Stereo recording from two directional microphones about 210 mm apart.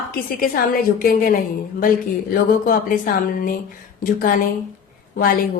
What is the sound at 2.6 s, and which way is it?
Speech, 40° left (ahead or behind).